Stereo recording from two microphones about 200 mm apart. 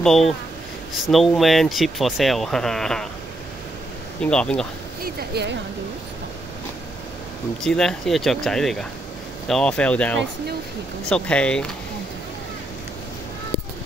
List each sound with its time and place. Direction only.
0.0 s speech: centre (ahead or behind)
4.2 s speech: 5° left (ahead or behind)
5.0 s speech: 55° right (ahead or behind)
7.6 s speech: centre (ahead or behind)